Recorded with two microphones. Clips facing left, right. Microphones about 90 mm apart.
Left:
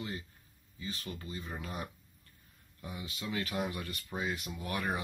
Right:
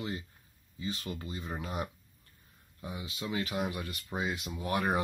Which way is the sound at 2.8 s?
20° right (ahead or behind).